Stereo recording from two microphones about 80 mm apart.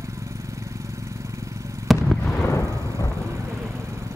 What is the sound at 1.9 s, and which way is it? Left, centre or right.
Fireworks, centre.